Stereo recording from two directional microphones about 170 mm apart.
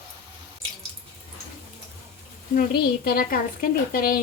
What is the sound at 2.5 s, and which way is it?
A woman's voice, 60° left (ahead or behind).